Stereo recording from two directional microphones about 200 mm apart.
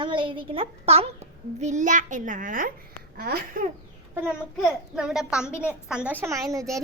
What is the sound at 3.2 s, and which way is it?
Babbling, 50° right (ahead or behind).